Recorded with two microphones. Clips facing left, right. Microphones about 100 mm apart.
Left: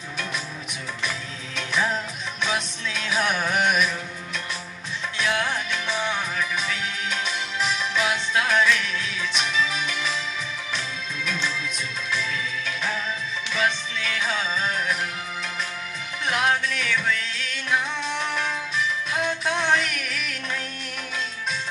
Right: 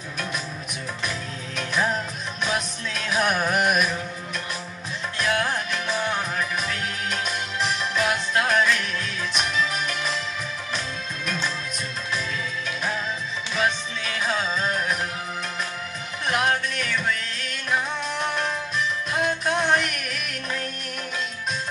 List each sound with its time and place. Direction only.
1.6 s music: 45° right (ahead or behind)
5.1 s music: 50° right (ahead or behind)
11.2 s music: 50° right (ahead or behind)
13.6 s music: 50° right (ahead or behind)
16.3 s music: 50° right (ahead or behind)
19.2 s music: 50° right (ahead or behind)